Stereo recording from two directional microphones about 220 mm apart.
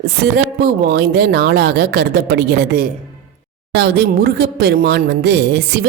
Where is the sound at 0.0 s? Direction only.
45° right (ahead or behind).